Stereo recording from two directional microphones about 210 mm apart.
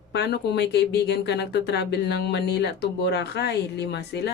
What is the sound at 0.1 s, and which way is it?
Speech, 50° left (ahead or behind).